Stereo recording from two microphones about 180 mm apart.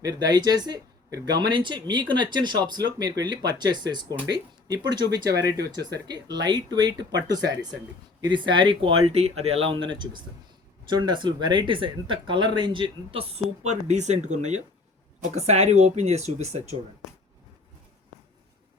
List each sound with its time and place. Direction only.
0.0 s speech: 20° right (ahead or behind)
5.5 s speech: 70° right (ahead or behind)
6.1 s speech: 20° right (ahead or behind)
8.2 s speech: 25° right (ahead or behind)